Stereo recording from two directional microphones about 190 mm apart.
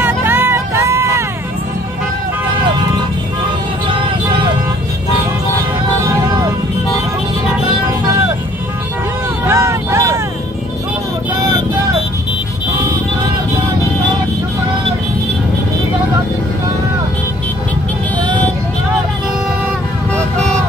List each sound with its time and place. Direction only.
0.0 s a sound: 10° right (ahead or behind)
3.8 s vehicle: 25° right (ahead or behind)
6.0 s vehicle: 15° right (ahead or behind)
9.5 s vehicle: 15° right (ahead or behind)